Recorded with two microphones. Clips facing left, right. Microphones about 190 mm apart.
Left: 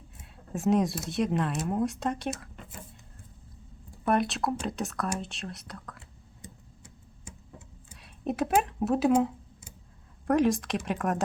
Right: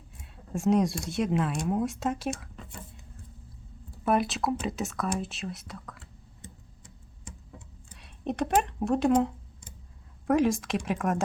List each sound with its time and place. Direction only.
0.2 s speech: centre (ahead or behind)
4.0 s speech: centre (ahead or behind)
6.4 s tick-tock: 10° left (ahead or behind)
7.9 s a sound: centre (ahead or behind)
10.2 s speech: centre (ahead or behind)